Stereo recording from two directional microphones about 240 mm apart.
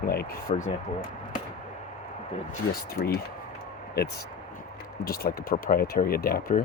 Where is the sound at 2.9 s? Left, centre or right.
Left.